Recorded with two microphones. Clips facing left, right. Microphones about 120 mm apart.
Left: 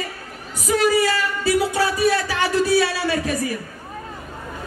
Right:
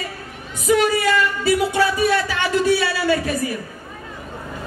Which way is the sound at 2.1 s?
35° left (ahead or behind).